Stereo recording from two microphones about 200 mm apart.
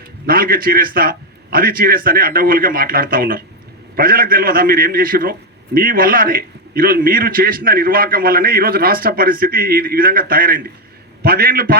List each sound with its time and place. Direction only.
0.3 s a man's voice: 45° right (ahead or behind)